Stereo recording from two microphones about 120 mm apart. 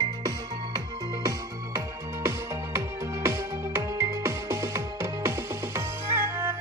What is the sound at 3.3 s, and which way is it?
Music, 25° right (ahead or behind).